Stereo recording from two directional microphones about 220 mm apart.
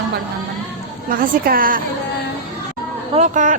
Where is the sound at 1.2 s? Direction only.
40° right (ahead or behind).